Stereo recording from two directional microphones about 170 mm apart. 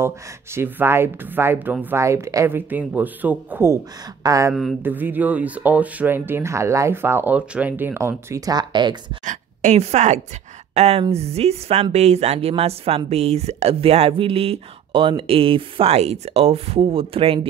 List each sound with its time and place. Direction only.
0.6 s speech: 15° right (ahead or behind)
9.2 s a sound: 45° right (ahead or behind)
10.7 s speech: 40° right (ahead or behind)